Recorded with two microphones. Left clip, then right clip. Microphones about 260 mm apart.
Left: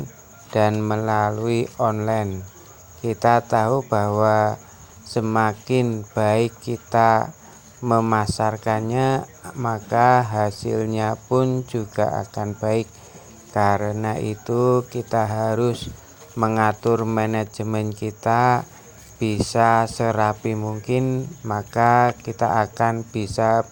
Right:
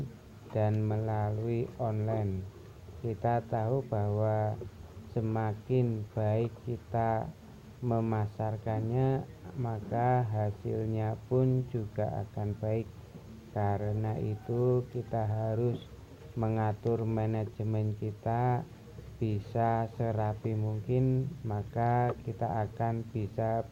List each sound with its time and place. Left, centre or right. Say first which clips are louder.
0.5 s speech: left 13 dB; left